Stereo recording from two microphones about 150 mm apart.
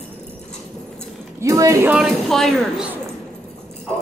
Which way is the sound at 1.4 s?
20° right (ahead or behind).